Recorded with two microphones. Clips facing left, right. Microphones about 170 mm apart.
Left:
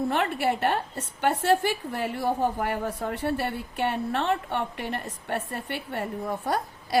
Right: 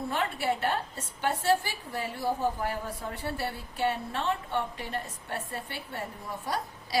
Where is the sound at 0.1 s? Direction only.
65° left (ahead or behind).